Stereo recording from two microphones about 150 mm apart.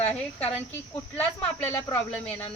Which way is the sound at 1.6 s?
20° left (ahead or behind).